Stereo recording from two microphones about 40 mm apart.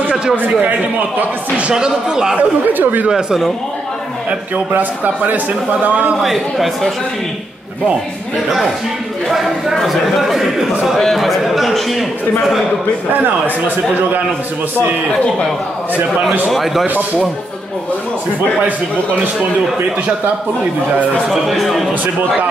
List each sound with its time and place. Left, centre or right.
0.1 s a sound: centre
0.4 s a man's voice: right
1.7 s speech: centre
2.3 s a man's voice: right
3.1 s speech: centre
4.7 s a man's voice: right
6.2 s a man's voice: centre
9.8 s a man's voice: centre
16.4 s a man's voice: centre
21.3 s a man's voice: centre